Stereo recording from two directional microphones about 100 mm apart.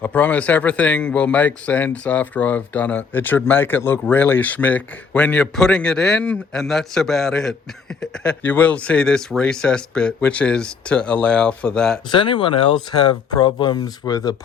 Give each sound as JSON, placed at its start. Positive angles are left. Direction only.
{"t": 0.0, "sound": "speech", "side_deg": 15}
{"t": 12.1, "sound": "speech", "side_deg": 55}